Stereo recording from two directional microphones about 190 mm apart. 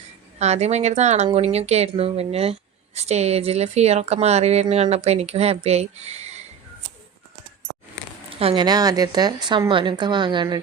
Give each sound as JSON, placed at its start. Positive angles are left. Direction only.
{"t": 0.3, "sound": "speech", "side_deg": -35}
{"t": 8.3, "sound": "a woman's voice", "side_deg": -30}